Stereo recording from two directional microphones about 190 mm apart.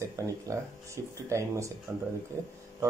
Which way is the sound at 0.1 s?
15° right (ahead or behind).